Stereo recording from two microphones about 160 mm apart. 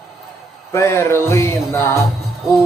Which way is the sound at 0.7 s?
15° left (ahead or behind).